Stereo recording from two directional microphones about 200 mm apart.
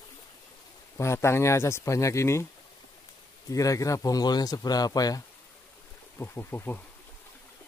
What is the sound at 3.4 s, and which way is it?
Speech, 15° left (ahead or behind).